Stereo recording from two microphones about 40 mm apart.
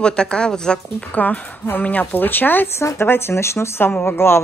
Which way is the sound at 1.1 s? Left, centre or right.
Left.